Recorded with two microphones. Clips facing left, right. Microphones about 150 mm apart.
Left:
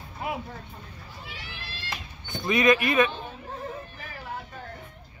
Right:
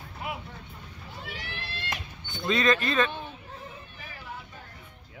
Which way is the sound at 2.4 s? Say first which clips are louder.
Left 3 dB; 15° left (ahead or behind).